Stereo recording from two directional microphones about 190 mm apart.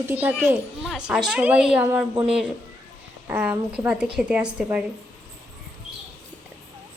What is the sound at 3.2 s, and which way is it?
A child's voice, 10° right (ahead or behind).